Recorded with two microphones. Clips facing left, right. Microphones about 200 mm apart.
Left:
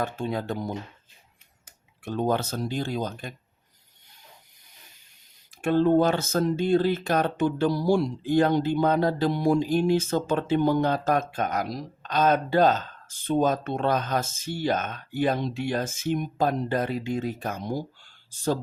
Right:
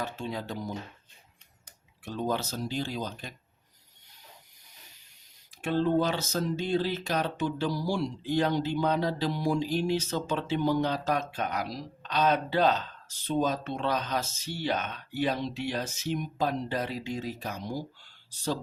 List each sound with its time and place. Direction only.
0.0 s speech: 50° left (ahead or behind)
2.0 s speech: 55° left (ahead or behind)
5.6 s speech: 50° left (ahead or behind)